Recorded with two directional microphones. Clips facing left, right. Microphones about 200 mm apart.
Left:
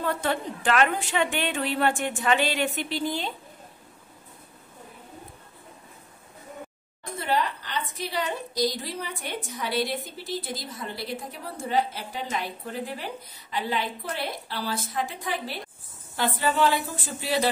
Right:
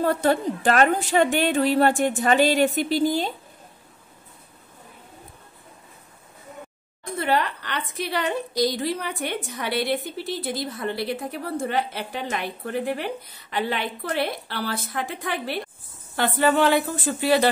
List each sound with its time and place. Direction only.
0.0 s a woman's voice: 40° right (ahead or behind)
7.2 s a woman's voice: 65° right (ahead or behind)